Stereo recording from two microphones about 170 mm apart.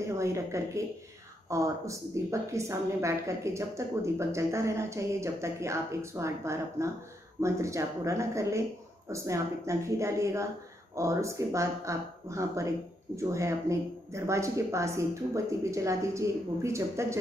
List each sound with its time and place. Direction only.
0.0 s a woman's voice: 15° right (ahead or behind)